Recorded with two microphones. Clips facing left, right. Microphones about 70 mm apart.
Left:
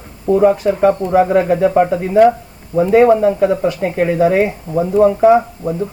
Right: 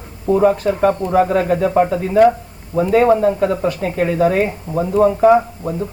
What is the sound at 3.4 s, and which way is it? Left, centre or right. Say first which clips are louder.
A woman's voice: left 3 dB; centre.